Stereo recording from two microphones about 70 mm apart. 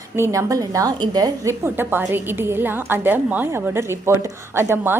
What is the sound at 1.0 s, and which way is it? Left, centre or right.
Speech, right.